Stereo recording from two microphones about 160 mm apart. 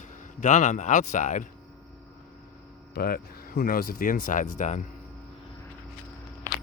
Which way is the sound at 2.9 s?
65° left (ahead or behind).